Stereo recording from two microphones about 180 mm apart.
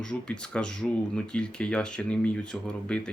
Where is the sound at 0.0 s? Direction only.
5° left (ahead or behind).